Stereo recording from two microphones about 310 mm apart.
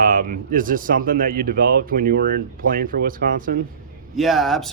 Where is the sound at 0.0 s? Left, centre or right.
Right.